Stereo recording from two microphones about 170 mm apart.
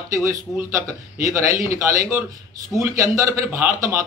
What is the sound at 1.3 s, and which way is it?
Speech, 15° right (ahead or behind).